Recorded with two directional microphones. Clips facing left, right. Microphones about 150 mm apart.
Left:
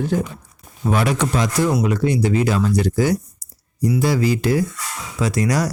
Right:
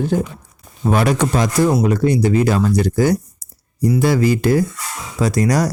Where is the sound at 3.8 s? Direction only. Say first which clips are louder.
Right 3 dB; 55° right (ahead or behind); by 5.7 s 40° right (ahead or behind).